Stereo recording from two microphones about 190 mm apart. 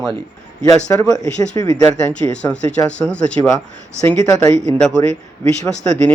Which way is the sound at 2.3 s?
5° left (ahead or behind).